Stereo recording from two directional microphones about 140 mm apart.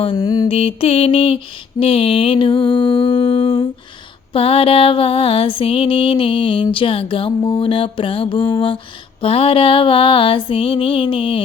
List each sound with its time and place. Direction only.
0.2 s mantra: 25° left (ahead or behind)
0.4 s music: 40° left (ahead or behind)